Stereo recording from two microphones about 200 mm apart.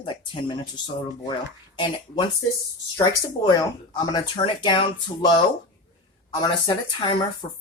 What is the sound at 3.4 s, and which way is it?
Speech, 20° left (ahead or behind).